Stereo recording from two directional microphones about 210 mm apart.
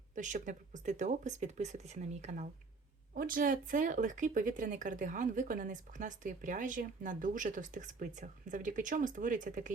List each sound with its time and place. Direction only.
0.2 s speech: 35° right (ahead or behind)